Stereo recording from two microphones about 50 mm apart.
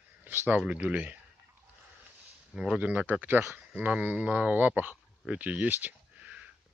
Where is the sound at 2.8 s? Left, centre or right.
Right.